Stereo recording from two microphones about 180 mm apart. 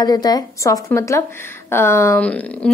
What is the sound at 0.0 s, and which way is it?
A woman's voice, 20° left (ahead or behind).